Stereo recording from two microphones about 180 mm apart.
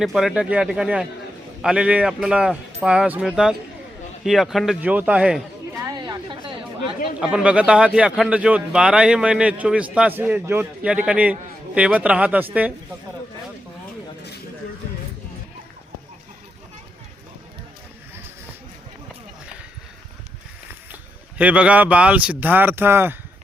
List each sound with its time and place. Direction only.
0.0 s speech: centre (ahead or behind)
5.7 s chatter: 20° right (ahead or behind)
7.2 s a man's voice: 5° right (ahead or behind)
20.9 s speech: 5° right (ahead or behind)